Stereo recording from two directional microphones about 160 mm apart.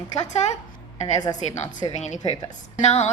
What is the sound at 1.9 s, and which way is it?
A woman's voice, 45° left (ahead or behind).